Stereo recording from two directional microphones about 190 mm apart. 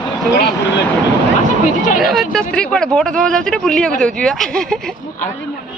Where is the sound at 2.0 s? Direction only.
Centre (ahead or behind).